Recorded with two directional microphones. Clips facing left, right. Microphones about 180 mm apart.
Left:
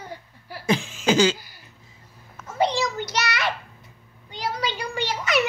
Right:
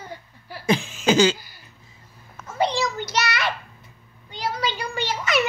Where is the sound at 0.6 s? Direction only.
20° right (ahead or behind).